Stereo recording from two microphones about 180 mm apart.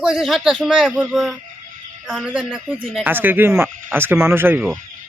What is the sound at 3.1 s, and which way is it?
Speech, 10° right (ahead or behind).